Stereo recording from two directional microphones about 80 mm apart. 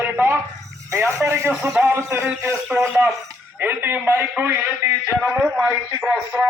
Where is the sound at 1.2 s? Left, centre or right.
Right.